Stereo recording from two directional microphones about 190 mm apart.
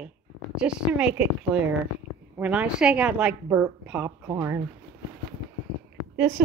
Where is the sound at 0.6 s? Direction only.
5° right (ahead or behind).